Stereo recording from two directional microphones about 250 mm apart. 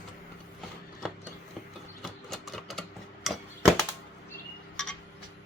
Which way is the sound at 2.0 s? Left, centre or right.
Centre.